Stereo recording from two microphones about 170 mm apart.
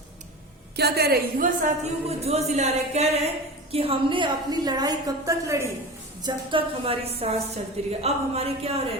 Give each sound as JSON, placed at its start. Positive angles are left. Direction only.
{"t": 0.8, "sound": "a woman's voice", "side_deg": -70}
{"t": 6.2, "sound": "a woman's voice", "side_deg": -30}